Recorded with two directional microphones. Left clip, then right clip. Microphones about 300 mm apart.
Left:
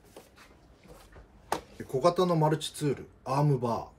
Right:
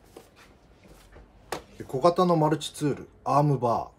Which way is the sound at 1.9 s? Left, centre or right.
Centre.